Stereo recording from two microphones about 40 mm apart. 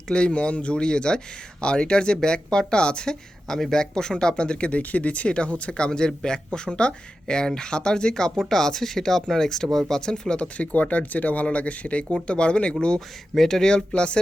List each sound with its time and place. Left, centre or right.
0.1 s speech: left
4.8 s speech: left
13.3 s speech: centre
13.7 s speech: left